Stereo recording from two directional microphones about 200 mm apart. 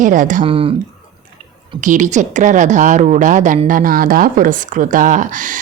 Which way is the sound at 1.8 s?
40° right (ahead or behind).